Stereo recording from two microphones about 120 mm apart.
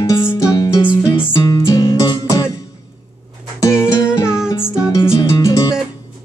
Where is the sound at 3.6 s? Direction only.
25° left (ahead or behind).